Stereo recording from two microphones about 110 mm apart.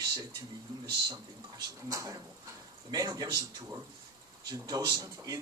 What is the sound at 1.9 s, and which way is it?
Speech, 30° right (ahead or behind).